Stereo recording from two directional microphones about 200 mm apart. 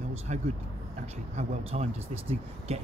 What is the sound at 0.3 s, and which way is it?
Speech, 35° right (ahead or behind).